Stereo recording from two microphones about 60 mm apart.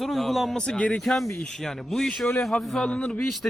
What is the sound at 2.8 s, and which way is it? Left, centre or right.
Speech, centre.